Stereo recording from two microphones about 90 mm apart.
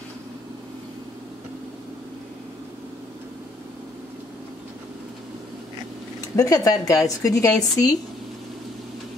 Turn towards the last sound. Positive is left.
turn(degrees=45)  # may be behind; listen again after turning